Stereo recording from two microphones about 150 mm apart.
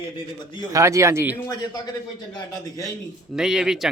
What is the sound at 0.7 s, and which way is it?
Speech, 20° right (ahead or behind).